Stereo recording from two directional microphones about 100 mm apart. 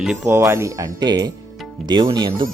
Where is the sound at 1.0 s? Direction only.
45° right (ahead or behind).